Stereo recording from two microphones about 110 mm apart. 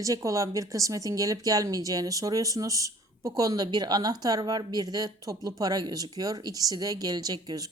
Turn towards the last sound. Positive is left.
turn(degrees=-35)  # may be behind; listen again after turning